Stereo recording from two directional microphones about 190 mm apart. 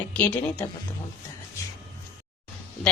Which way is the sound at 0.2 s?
10° left (ahead or behind).